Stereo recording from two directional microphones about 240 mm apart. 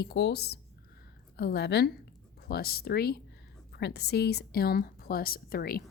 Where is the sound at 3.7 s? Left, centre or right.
Left.